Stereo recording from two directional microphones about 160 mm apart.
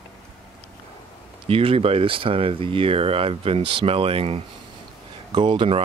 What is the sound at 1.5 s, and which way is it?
Speech, 35° right (ahead or behind).